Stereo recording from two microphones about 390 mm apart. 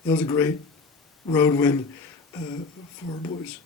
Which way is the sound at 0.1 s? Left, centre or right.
Centre.